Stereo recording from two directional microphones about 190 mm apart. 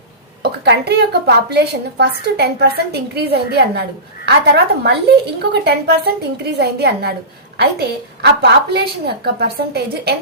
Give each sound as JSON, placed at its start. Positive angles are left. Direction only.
{"t": 0.4, "sound": "a woman's voice", "side_deg": -60}